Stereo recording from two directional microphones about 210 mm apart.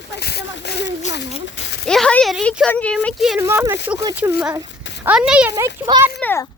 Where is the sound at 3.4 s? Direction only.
10° right (ahead or behind).